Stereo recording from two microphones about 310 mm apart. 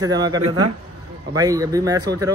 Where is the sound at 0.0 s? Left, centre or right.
Centre.